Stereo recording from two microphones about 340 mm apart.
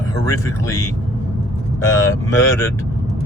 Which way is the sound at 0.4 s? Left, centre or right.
Centre.